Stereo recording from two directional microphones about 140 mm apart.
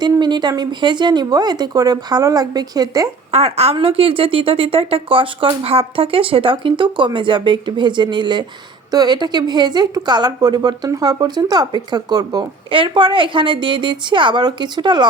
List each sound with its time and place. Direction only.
0.0 s speech: 30° right (ahead or behind)
3.3 s speech: 45° right (ahead or behind)